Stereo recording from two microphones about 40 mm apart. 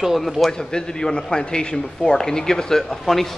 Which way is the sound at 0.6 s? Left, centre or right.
Centre.